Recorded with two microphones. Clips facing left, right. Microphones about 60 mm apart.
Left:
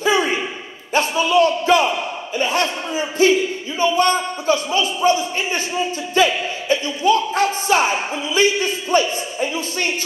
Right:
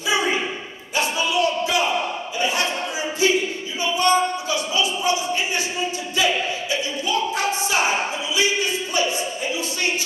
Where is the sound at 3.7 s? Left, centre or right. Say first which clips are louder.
Left 2 dB; left.